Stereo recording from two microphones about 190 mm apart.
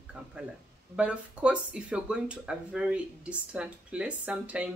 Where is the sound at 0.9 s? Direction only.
5° right (ahead or behind).